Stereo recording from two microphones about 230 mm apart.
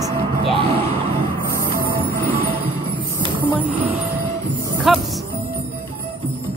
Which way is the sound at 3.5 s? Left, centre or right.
Centre.